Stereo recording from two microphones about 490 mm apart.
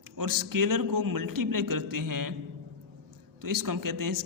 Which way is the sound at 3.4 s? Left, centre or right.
Right.